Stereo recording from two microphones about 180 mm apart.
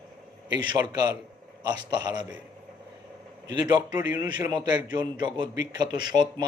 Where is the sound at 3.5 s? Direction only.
25° right (ahead or behind).